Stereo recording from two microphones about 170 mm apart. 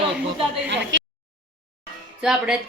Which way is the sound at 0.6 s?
90° right.